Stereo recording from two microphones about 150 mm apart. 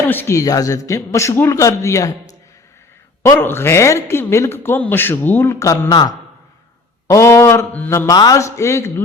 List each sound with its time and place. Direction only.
0.1 s a man's voice: 15° left (ahead or behind)
3.2 s a man's voice: 15° left (ahead or behind)